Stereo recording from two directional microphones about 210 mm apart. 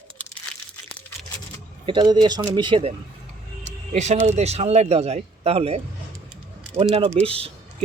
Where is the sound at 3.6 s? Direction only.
35° right (ahead or behind).